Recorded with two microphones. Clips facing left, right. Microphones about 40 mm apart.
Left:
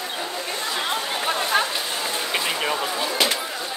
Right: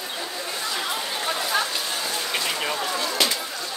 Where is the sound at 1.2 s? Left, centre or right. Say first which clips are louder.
Left 3 dB; left.